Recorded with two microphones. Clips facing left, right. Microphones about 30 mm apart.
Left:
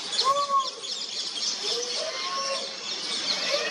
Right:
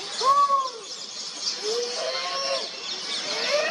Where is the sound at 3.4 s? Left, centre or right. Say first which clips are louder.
Right 6 dB; centre.